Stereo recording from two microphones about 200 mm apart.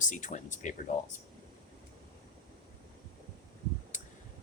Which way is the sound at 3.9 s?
40° left (ahead or behind).